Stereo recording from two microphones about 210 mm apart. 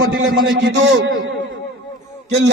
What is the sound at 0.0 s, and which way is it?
A man's voice, 60° right (ahead or behind).